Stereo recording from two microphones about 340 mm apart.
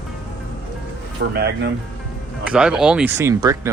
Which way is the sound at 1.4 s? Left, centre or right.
Right.